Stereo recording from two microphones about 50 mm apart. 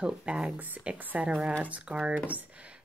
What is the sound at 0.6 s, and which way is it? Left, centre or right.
A woman's voice, right.